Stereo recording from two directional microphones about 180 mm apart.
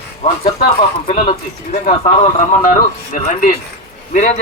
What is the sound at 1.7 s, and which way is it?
A man's voice, 40° left (ahead or behind).